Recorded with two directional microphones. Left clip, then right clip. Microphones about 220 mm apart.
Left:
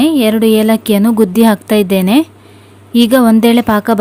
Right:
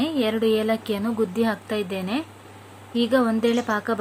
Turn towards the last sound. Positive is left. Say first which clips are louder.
# left 12 dB
turn(degrees=45)  # may be behind; listen again after turning